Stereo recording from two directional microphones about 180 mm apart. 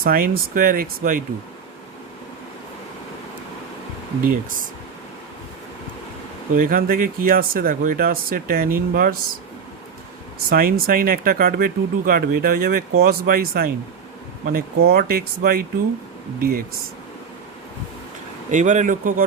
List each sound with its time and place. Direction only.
0.0 s speech: 55° right (ahead or behind)
4.2 s speech: 50° right (ahead or behind)
6.6 s speech: 50° right (ahead or behind)
10.5 s speech: 55° right (ahead or behind)
18.5 s speech: 45° right (ahead or behind)